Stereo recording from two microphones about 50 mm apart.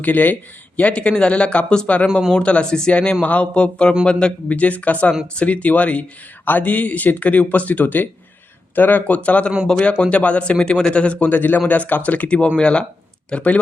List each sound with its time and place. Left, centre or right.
0.0 s speech: left
11.3 s speech: left